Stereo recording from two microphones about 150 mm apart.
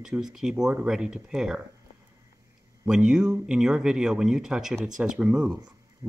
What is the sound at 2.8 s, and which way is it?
Speech, 5° right (ahead or behind).